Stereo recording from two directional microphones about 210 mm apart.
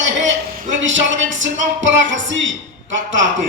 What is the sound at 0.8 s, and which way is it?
Music, 65° right (ahead or behind).